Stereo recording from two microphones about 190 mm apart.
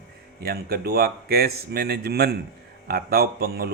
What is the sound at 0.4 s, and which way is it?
Speech, 55° right (ahead or behind).